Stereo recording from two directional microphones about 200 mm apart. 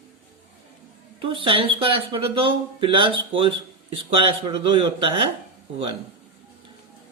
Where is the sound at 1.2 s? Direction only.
25° right (ahead or behind).